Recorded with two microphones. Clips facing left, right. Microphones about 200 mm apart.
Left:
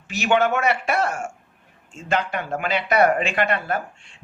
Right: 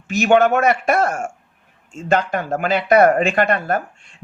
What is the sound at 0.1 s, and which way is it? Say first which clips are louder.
Speech: right 6 dB; 45° right (ahead or behind).